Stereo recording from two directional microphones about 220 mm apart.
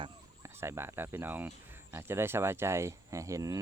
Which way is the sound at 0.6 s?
10° right (ahead or behind).